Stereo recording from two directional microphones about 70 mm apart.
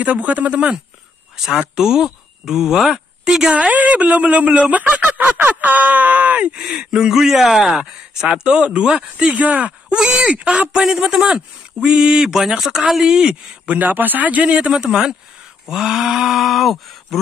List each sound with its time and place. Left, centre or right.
0.0 s speech: right
3.4 s speech: centre
6.6 s speech: centre
13.7 s speech: right; by 17.2 s centre